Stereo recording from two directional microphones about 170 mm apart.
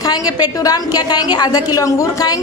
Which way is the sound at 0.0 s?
20° left (ahead or behind).